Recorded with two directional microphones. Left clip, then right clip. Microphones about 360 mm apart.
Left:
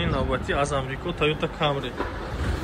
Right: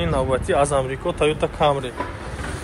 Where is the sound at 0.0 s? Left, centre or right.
Centre.